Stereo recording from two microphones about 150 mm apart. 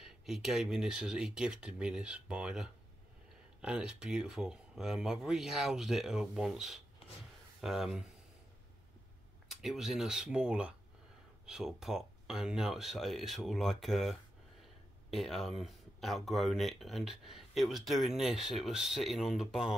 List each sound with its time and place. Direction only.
0.0 s speech: centre (ahead or behind)
9.5 s speech: centre (ahead or behind)